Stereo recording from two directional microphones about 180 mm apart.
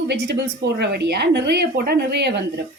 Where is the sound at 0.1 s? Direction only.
70° right (ahead or behind).